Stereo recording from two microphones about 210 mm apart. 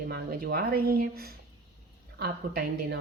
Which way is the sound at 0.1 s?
45° right (ahead or behind).